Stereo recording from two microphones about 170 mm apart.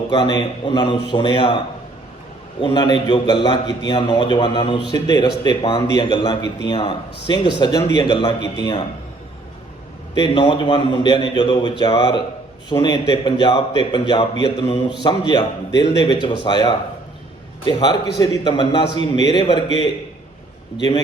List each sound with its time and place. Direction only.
0.1 s a man's voice: 25° left (ahead or behind)
10.2 s a man's voice: 25° left (ahead or behind)